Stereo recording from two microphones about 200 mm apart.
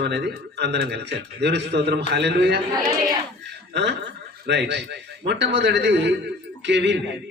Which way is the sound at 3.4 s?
60° right (ahead or behind).